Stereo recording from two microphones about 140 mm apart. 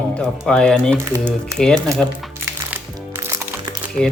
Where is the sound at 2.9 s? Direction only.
20° right (ahead or behind).